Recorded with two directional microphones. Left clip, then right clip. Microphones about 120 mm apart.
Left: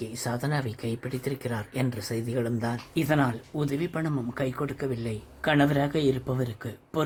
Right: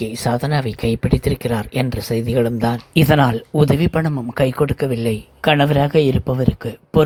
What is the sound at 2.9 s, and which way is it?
Speech, 55° right (ahead or behind).